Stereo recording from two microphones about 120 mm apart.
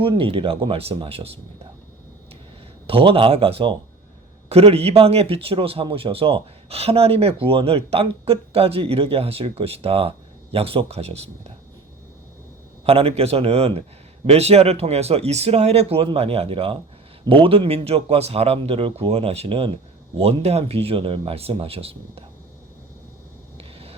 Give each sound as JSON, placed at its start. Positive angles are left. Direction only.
{"t": 0.0, "sound": "a man's voice", "side_deg": -45}
{"t": 2.8, "sound": "a man's voice", "side_deg": -50}
{"t": 12.8, "sound": "a man's voice", "side_deg": -55}
{"t": 23.6, "sound": "vehicle", "side_deg": -55}